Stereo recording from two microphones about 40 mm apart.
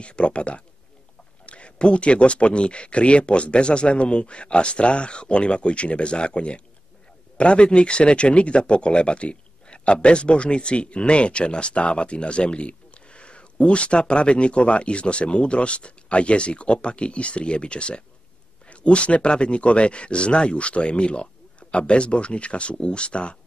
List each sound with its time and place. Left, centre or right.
0.0 s speech: left